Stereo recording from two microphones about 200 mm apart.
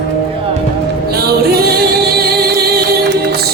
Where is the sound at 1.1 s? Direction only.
50° right (ahead or behind).